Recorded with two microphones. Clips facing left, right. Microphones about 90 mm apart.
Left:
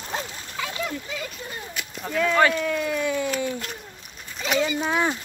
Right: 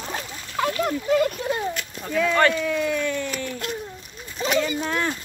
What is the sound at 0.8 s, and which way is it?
Speech, 55° right (ahead or behind).